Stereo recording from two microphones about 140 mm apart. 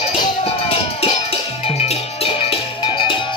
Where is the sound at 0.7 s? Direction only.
45° left (ahead or behind).